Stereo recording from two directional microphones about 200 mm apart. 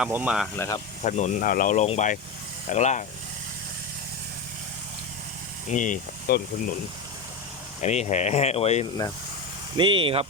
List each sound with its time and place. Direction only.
0.0 s speech: 5° right (ahead or behind)
0.5 s speech: 10° left (ahead or behind)
1.0 s speech: 35° left (ahead or behind)
5.6 s speech: 40° left (ahead or behind)
7.8 s speech: 35° left (ahead or behind)
9.7 s speech: 25° right (ahead or behind)